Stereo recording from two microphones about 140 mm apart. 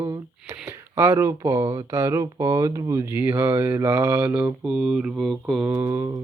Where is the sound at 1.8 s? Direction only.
20° right (ahead or behind); by 5.6 s centre (ahead or behind).